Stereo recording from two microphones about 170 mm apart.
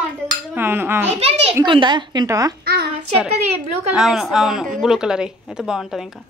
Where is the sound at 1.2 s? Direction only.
35° right (ahead or behind).